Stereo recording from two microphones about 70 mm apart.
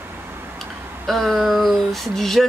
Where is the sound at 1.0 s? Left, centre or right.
Centre.